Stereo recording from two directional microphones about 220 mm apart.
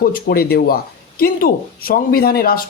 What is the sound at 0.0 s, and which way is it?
Speech, 45° left (ahead or behind).